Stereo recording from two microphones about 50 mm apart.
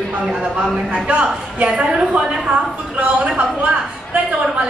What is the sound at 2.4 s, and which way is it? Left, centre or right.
A woman's voice, right.